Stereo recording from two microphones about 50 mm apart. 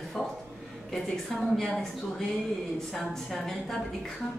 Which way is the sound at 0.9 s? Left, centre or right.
Centre.